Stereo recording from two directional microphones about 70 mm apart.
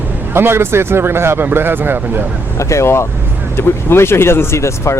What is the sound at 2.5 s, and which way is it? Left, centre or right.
Speech, left.